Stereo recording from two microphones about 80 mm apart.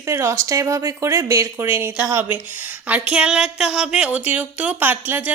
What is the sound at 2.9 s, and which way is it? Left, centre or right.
Speech, centre.